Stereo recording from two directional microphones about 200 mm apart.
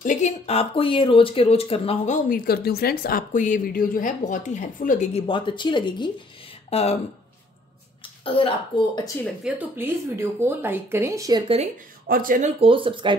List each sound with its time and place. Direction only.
0.0 s speech: 35° left (ahead or behind)
5.2 s speech: 25° left (ahead or behind)
8.2 s speech: 25° left (ahead or behind)
9.2 s speech: 5° right (ahead or behind)
11.4 s speech: 30° right (ahead or behind)
12.1 s speech: 45° right (ahead or behind)
12.5 s speech: 25° right (ahead or behind)